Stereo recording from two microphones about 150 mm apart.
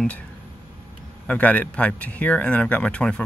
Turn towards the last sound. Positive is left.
turn(degrees=5)  # may be behind; listen again after turning